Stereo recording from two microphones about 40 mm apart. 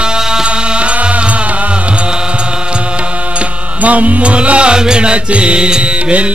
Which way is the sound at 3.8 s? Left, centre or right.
Right.